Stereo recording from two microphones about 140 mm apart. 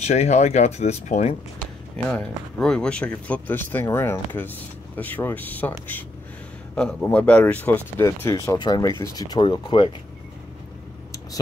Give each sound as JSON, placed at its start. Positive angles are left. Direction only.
{"t": 0.0, "sound": "speech", "side_deg": 50}
{"t": 2.0, "sound": "speech", "side_deg": 5}